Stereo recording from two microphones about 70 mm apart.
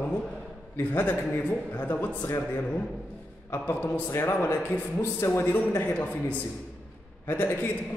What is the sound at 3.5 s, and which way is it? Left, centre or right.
A man's voice, left.